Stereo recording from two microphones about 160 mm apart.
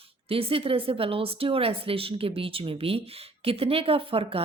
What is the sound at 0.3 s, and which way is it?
Speech, 35° right (ahead or behind).